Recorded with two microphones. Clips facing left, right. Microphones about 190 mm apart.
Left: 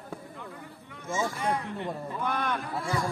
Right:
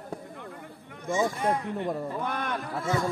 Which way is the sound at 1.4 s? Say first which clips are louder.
Right 3 dB; 50° right (ahead or behind).